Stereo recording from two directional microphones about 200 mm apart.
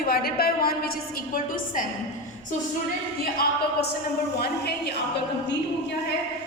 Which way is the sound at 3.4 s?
50° left (ahead or behind).